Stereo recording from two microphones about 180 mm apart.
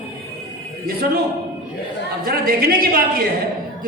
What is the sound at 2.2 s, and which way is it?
Speech, 55° right (ahead or behind).